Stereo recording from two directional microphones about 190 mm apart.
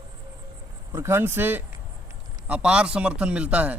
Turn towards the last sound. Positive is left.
turn(degrees=-5)  # may be behind; listen again after turning